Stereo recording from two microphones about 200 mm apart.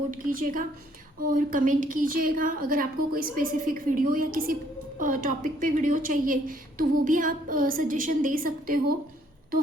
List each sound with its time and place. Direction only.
0.1 s a woman's voice: 45° right (ahead or behind)